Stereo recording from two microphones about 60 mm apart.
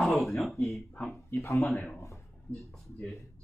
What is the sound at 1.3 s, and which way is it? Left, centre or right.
Speech, left.